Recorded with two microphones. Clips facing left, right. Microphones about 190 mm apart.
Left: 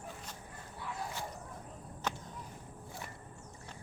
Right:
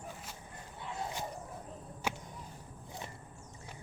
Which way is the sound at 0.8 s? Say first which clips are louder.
Right 2 dB; 25° right (ahead or behind).